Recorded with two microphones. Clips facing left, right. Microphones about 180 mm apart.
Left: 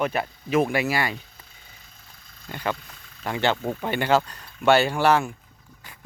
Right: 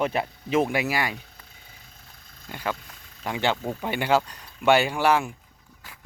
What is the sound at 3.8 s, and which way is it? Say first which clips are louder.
A man's voice: left 1 dB; 10° right (ahead or behind).